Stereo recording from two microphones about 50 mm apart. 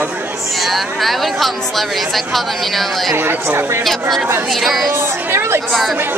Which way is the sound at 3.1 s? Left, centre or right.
Right.